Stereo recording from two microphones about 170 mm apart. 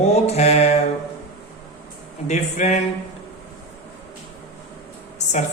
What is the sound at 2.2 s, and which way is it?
Speech, 45° left (ahead or behind).